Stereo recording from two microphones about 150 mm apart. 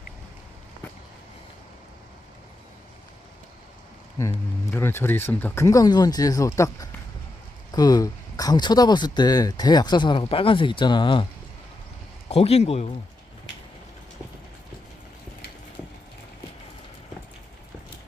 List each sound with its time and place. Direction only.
4.2 s speech: 15° left (ahead or behind); by 11.3 s 30° left (ahead or behind)
12.3 s a man's voice: 45° left (ahead or behind)